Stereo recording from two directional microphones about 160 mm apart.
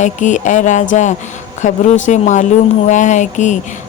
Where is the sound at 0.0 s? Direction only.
50° left (ahead or behind).